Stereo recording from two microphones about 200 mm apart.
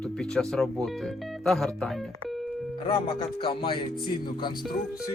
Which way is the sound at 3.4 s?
25° left (ahead or behind).